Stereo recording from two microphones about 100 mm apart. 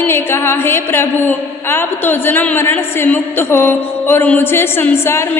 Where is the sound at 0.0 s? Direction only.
25° left (ahead or behind).